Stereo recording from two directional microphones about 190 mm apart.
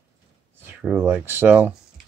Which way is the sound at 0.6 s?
10° right (ahead or behind).